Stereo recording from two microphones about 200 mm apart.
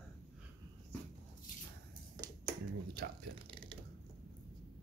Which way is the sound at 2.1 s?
20° right (ahead or behind).